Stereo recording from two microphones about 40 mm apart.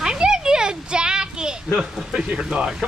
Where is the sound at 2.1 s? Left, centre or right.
Right.